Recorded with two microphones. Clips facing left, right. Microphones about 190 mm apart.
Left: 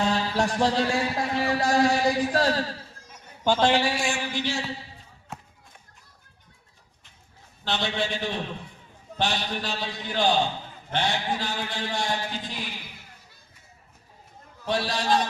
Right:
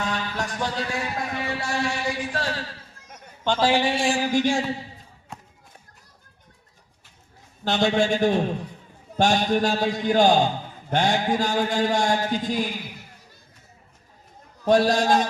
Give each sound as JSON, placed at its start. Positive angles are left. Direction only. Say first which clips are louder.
{"t": 0.0, "sound": "a man's voice", "louder": "left 4 dB", "side_deg": 30}
{"t": 3.6, "sound": "speech", "louder": "right 2 dB", "side_deg": -10}
{"t": 3.8, "sound": "a sound", "louder": "right 5 dB", "side_deg": -30}
{"t": 5.3, "sound": "run", "louder": "left 1 dB", "side_deg": 5}
{"t": 7.6, "sound": "a man's voice", "louder": "right 7 dB", "side_deg": -45}
{"t": 14.6, "sound": "a man's voice", "louder": "right 9 dB", "side_deg": -45}